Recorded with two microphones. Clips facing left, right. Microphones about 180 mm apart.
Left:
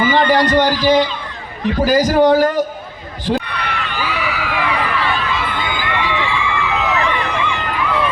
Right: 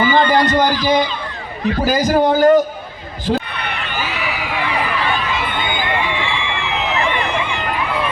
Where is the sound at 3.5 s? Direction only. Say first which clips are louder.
Left 1 dB; 25° right (ahead or behind).